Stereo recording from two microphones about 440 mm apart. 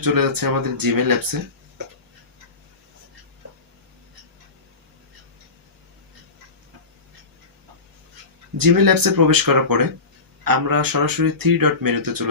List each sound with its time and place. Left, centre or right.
0.0 s speech: right
8.5 s speech: right